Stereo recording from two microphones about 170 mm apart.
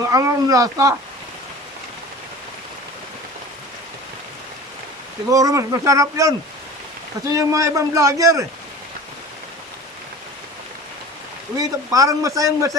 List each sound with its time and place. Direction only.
0.0 s a man's voice: 20° right (ahead or behind)
5.3 s a man's voice: 20° right (ahead or behind)
7.3 s a man's voice: 20° right (ahead or behind)
11.5 s a man's voice: 20° right (ahead or behind)